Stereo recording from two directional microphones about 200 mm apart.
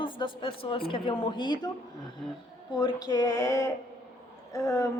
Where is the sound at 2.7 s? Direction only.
20° left (ahead or behind).